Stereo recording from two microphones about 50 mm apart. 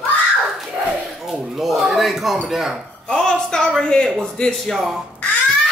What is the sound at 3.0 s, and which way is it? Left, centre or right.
A woman's voice, centre.